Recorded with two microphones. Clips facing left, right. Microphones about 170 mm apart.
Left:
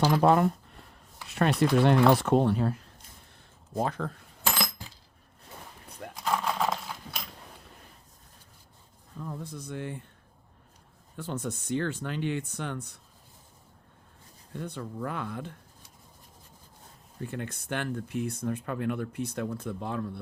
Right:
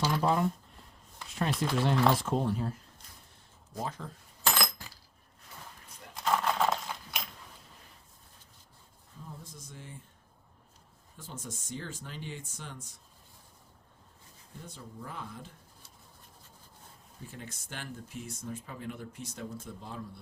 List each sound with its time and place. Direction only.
0.0 s speech: 60° left (ahead or behind)
6.1 s horse: centre (ahead or behind)
9.1 s speech: 75° left (ahead or behind)
11.2 s speech: 65° left (ahead or behind)
14.5 s speech: 70° left (ahead or behind)
17.2 s speech: 65° left (ahead or behind)